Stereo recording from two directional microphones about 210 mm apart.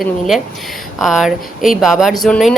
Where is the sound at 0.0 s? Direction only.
Centre (ahead or behind).